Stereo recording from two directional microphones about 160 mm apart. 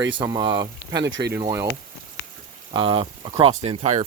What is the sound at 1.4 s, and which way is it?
Speech, 25° right (ahead or behind).